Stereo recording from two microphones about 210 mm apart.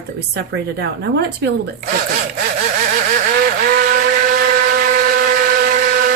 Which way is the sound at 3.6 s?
45° right (ahead or behind).